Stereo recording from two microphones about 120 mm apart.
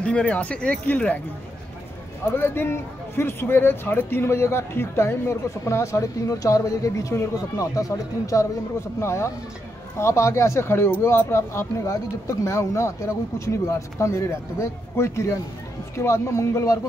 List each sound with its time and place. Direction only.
0.0 s speech: 10° left (ahead or behind)
2.2 s speech: 20° left (ahead or behind)